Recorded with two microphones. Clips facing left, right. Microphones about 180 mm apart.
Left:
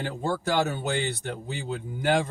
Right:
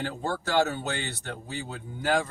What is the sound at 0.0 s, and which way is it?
Speech, 15° left (ahead or behind).